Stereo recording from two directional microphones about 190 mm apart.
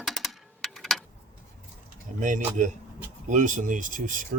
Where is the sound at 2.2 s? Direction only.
40° right (ahead or behind).